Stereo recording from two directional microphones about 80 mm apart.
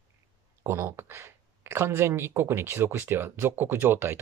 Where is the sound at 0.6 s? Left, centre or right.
Right.